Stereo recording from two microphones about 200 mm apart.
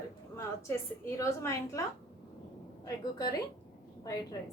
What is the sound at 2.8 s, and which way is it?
A woman's voice, 20° left (ahead or behind).